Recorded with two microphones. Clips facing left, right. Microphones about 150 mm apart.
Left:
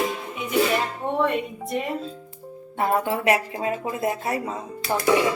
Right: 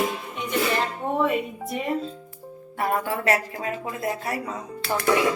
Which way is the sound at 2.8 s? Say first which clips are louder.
Left 2 dB; 20° left (ahead or behind).